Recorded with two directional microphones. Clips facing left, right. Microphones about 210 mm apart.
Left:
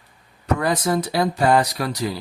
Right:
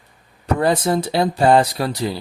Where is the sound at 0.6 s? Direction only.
30° right (ahead or behind).